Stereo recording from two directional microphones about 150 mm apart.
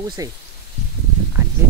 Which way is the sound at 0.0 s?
25° right (ahead or behind).